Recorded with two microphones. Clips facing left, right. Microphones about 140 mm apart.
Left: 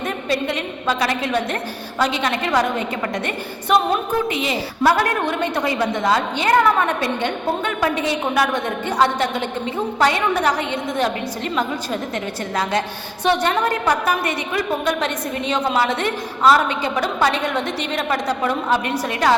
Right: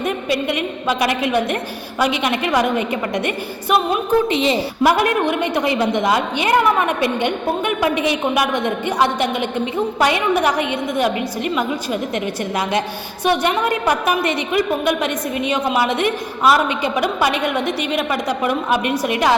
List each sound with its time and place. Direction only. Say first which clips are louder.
0.0 s a woman's voice: right 2 dB; 15° right (ahead or behind)
4.3 s a woman's voice: right 5 dB; 25° right (ahead or behind)
4.8 s a woman's voice: right 1 dB; 15° right (ahead or behind)